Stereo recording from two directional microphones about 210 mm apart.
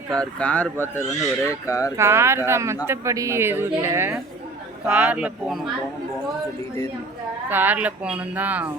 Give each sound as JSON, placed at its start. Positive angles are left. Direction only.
{"t": 0.1, "sound": "speech", "side_deg": 5}
{"t": 2.0, "sound": "speech", "side_deg": -10}
{"t": 7.5, "sound": "speech", "side_deg": -10}